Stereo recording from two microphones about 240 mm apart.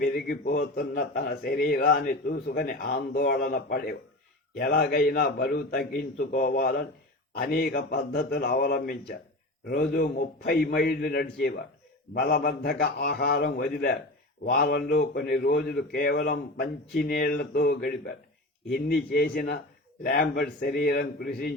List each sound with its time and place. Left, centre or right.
0.0 s a man's voice: left